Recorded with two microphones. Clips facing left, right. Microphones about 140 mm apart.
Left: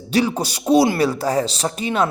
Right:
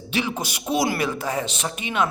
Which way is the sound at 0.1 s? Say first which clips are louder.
Left 7 dB; 35° left (ahead or behind).